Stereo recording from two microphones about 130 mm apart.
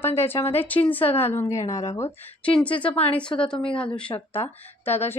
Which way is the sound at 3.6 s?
40° left (ahead or behind).